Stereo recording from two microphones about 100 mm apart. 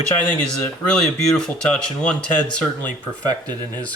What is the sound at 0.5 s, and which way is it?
Speech, 10° left (ahead or behind).